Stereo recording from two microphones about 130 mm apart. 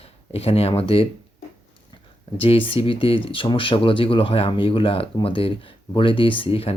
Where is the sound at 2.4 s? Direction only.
45° left (ahead or behind).